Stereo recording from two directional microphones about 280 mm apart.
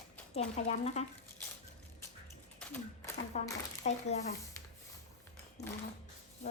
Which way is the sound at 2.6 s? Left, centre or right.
Centre.